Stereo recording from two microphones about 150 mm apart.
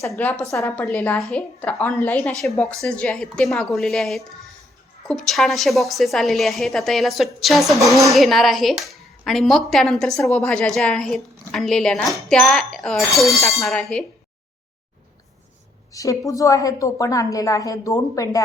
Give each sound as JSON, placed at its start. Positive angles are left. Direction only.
{"t": 0.2, "sound": "a woman's voice", "side_deg": 10}
{"t": 15.9, "sound": "a woman's voice", "side_deg": 20}